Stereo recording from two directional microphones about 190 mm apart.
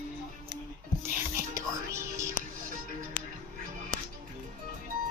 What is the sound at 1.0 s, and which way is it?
Speech, 15° right (ahead or behind).